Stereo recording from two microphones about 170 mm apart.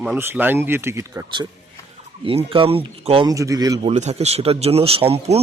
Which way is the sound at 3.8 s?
40° right (ahead or behind).